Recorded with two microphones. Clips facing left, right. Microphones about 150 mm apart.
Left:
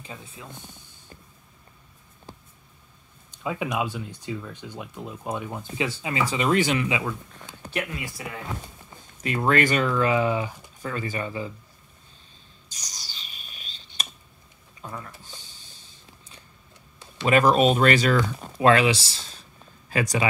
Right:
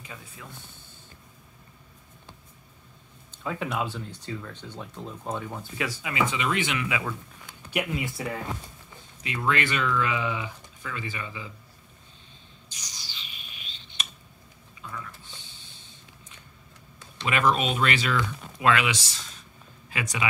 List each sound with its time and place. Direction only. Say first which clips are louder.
0.0 s speech: left 3 dB; 25° left (ahead or behind)
3.3 s speech: left 3 dB; 15° left (ahead or behind); by 6.9 s 35° left (ahead or behind)
7.7 s speech: right 2 dB; 20° right (ahead or behind)
9.2 s speech: left 5 dB; 45° left (ahead or behind)
12.6 s a sound: left 1 dB; 40° left (ahead or behind)
17.2 s speech: left 6 dB; 40° left (ahead or behind)